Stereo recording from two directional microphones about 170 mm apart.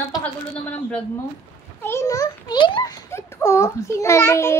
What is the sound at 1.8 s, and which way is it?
A child's voice, 15° left (ahead or behind).